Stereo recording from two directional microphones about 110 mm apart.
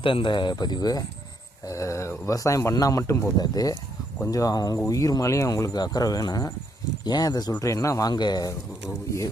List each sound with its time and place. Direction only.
0.0 s speech: 50° left (ahead or behind); by 3.3 s 25° left (ahead or behind)
3.3 s speech: 35° left (ahead or behind)